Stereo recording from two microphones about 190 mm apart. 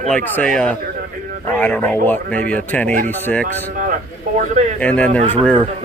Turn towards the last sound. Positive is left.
turn(degrees=5)  # may be behind; listen again after turning